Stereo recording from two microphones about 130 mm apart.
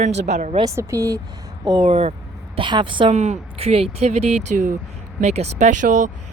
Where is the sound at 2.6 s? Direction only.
40° right (ahead or behind).